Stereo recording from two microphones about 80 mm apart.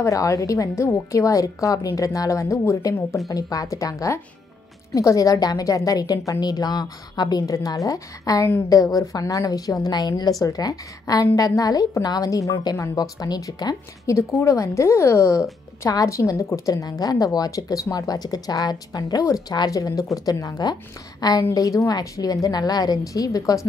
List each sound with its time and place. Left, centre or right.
0.0 s a woman's voice: left
9.9 s a woman's voice: left
10.4 s a woman's voice: left
14.1 s a woman's voice: left